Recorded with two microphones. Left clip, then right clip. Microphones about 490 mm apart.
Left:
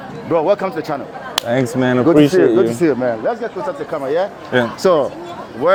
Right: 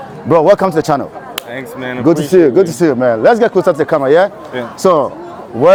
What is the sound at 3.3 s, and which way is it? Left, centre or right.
Speech, right.